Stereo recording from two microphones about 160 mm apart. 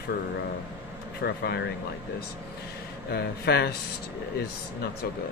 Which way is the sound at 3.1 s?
85° left.